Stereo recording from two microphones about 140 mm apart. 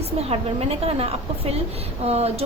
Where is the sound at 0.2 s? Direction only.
45° right (ahead or behind).